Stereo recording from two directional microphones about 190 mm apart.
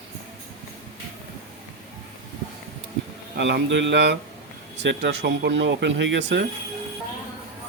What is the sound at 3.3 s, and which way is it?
Speech, 65° right (ahead or behind).